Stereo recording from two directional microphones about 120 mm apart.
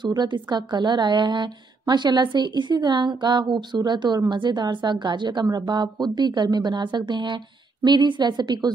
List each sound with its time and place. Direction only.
0.0 s a woman's voice: 35° right (ahead or behind)